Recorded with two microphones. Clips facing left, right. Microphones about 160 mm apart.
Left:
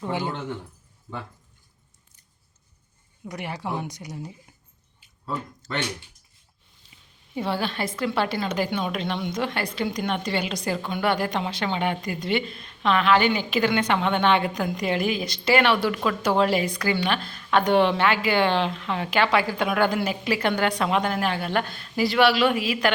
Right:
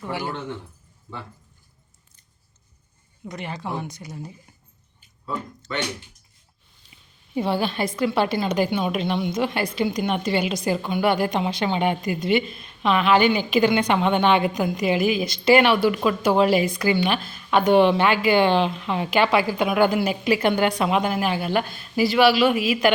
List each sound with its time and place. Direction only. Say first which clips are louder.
0.0 s speech: left 1 dB; 20° left (ahead or behind)
3.2 s speech: even; 10° left (ahead or behind)
5.2 s speech: right 1 dB; 45° left (ahead or behind)
7.3 s speech: right 4 dB; 15° right (ahead or behind)